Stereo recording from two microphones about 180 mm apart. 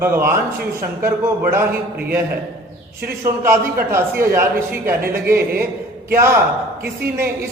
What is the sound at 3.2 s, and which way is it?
A man's voice, 15° right (ahead or behind).